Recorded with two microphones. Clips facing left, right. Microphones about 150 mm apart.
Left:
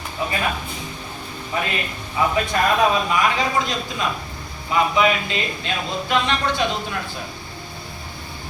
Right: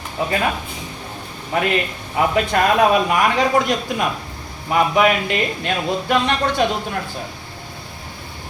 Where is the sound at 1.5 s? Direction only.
60° right (ahead or behind).